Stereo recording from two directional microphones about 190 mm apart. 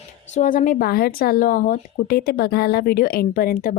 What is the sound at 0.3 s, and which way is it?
Speech, 45° left (ahead or behind).